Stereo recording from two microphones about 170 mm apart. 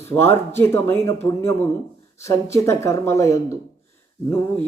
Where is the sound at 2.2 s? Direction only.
15° left (ahead or behind).